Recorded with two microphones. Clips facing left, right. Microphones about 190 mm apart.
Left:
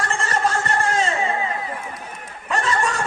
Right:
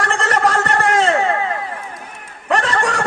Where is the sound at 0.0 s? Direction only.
70° right (ahead or behind).